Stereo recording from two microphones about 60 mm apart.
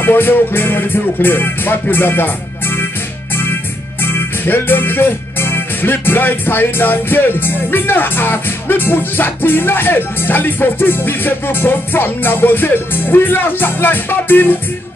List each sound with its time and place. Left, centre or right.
0.0 s music: left
4.0 s music: left